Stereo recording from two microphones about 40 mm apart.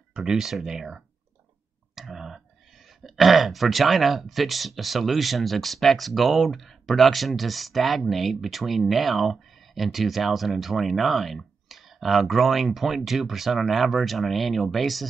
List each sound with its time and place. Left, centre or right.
0.1 s speech: centre
0.4 s speech: centre